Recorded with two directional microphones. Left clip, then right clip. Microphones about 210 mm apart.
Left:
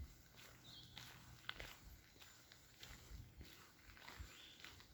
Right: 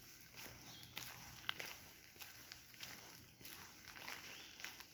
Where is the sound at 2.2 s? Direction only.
55° right (ahead or behind).